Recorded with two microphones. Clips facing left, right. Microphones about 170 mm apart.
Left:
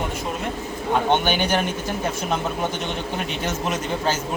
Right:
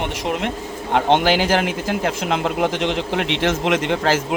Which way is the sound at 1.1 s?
90° right.